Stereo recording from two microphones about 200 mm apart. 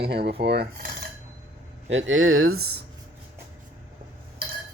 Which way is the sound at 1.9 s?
80° right.